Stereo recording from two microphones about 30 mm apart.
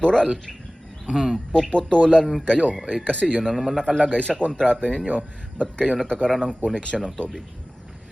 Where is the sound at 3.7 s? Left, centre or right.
Centre.